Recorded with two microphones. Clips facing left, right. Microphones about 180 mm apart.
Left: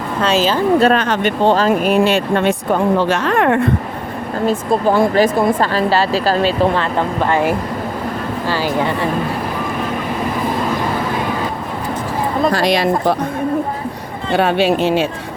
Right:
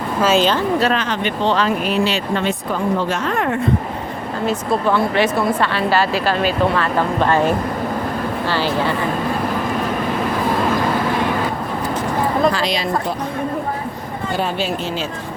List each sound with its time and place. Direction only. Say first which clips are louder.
0.2 s a woman's voice: even; centre (ahead or behind)
0.8 s speech: left 5 dB; 50° left (ahead or behind); by 3.6 s 70° left (ahead or behind)
4.4 s speech: left 3 dB; 40° left (ahead or behind)
7.3 s speech: left 1 dB; 15° left (ahead or behind)
12.5 s speech: left 4 dB; 60° left (ahead or behind)
14.3 s speech: left 8 dB; 65° left (ahead or behind)